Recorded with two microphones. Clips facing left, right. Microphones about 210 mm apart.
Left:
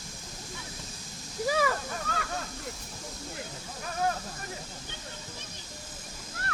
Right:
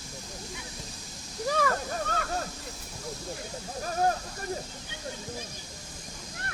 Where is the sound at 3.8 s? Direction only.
40° right (ahead or behind).